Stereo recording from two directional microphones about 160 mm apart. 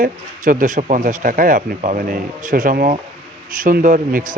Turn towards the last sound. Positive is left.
turn(degrees=-55)  # may be behind; listen again after turning